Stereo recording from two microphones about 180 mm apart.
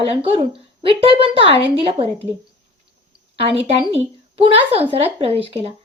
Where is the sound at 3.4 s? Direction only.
30° right (ahead or behind).